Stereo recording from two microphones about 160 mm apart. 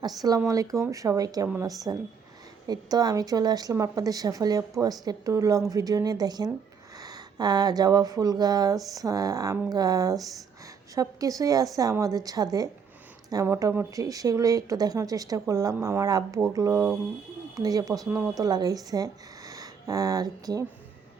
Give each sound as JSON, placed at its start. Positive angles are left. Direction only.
{"t": 0.0, "sound": "speech", "side_deg": -25}